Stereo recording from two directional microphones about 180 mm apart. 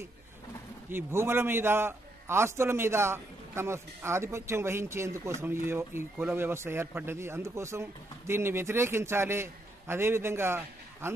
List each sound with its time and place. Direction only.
0.8 s a man's voice: 15° right (ahead or behind)